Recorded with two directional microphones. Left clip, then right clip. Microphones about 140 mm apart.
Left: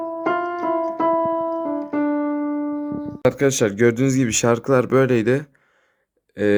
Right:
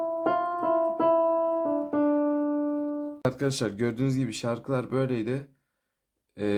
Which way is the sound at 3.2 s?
35° left (ahead or behind).